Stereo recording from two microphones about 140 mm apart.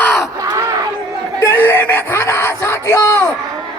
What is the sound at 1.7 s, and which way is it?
Yell, 15° left (ahead or behind).